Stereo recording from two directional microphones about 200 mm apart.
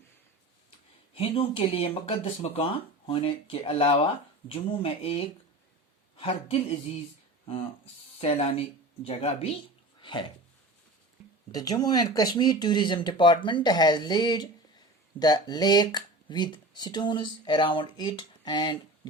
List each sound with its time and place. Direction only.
1.1 s speech: 25° left (ahead or behind)
8.2 s speech: 25° left (ahead or behind)
11.5 s speech: 20° left (ahead or behind)